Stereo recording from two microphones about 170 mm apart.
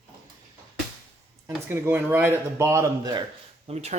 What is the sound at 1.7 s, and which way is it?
Speech, 15° right (ahead or behind).